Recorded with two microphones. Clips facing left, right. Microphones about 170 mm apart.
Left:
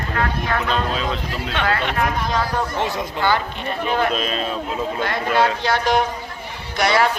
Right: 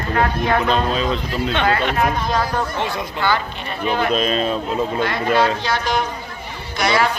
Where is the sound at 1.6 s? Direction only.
20° right (ahead or behind).